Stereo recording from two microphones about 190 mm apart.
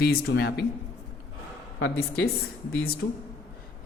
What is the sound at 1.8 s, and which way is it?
Speech, 70° left (ahead or behind).